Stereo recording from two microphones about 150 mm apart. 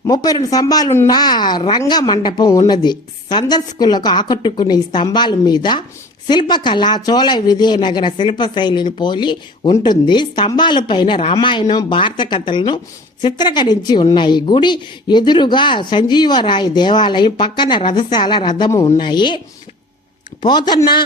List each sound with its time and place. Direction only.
0.0 s a woman's voice: 25° left (ahead or behind)
20.4 s a woman's voice: 30° left (ahead or behind)